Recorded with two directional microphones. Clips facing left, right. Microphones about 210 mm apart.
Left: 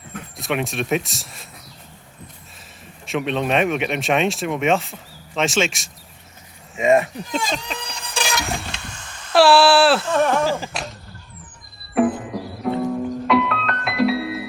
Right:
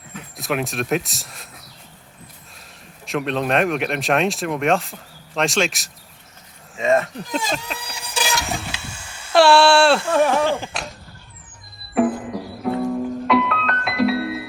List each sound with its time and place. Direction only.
0.3 s speech: centre (ahead or behind)
3.1 s speech: centre (ahead or behind)
6.7 s speech: 15° left (ahead or behind)
7.2 s vehicle: 5° right (ahead or behind)
9.3 s speech: 5° left (ahead or behind)
10.1 s speech: 5° right (ahead or behind)
10.4 s a sound: centre (ahead or behind)
11.9 s music: centre (ahead or behind)